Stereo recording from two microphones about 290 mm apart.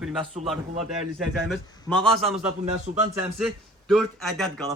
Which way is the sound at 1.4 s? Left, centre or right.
Centre.